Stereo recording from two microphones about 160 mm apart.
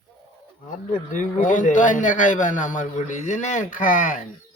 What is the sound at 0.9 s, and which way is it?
A man's voice, 55° left (ahead or behind).